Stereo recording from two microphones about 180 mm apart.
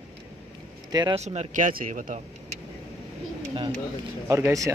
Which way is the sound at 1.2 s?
35° right (ahead or behind).